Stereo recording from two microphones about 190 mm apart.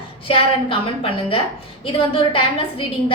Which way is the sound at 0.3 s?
30° left (ahead or behind).